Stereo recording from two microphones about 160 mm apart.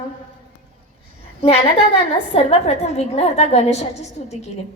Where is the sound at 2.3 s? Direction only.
40° left (ahead or behind).